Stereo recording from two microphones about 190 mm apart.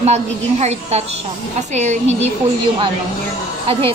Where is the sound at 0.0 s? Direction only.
35° right (ahead or behind).